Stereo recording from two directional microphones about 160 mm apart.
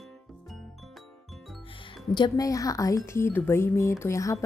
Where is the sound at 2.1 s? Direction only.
25° left (ahead or behind).